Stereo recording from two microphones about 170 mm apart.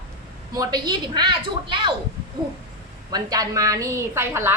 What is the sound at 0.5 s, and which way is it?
A woman's voice, 25° right (ahead or behind).